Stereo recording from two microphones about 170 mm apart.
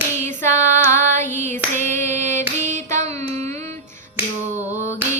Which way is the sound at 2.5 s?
45° right (ahead or behind).